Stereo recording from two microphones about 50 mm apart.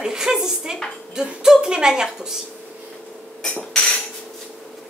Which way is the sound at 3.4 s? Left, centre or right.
Left.